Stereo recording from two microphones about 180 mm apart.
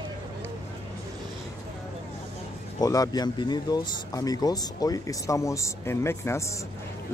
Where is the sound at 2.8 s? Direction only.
20° left (ahead or behind).